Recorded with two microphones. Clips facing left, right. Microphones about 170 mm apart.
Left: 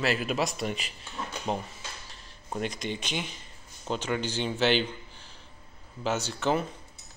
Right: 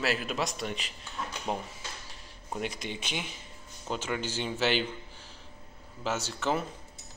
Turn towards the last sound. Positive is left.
turn(degrees=0)  # may be behind; listen again after turning